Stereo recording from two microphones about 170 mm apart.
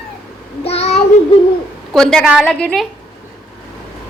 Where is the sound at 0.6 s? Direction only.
40° left (ahead or behind).